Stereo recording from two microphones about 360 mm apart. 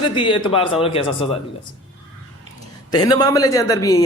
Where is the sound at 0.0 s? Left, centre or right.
Centre.